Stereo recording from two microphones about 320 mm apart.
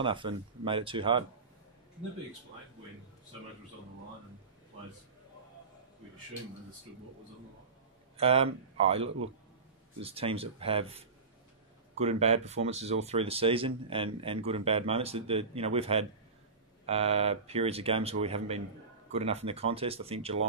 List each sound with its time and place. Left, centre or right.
0.0 s speech: centre
8.2 s speech: centre